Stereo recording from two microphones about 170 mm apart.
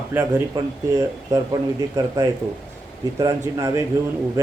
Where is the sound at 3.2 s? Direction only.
15° right (ahead or behind).